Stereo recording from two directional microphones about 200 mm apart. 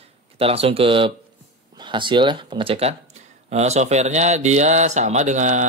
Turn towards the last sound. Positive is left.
turn(degrees=-35)  # may be behind; listen again after turning